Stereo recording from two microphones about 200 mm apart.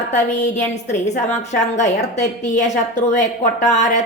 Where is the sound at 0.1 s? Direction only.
35° left (ahead or behind).